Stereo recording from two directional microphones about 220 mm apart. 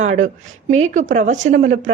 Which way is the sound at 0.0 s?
35° right (ahead or behind).